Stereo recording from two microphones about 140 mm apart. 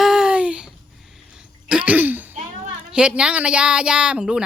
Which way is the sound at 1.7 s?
10° right (ahead or behind).